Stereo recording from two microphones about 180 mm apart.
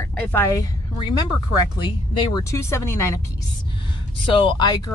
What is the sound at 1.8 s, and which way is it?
Speech, 25° left (ahead or behind).